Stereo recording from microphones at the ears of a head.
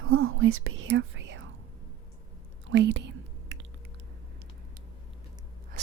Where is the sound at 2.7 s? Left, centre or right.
Right.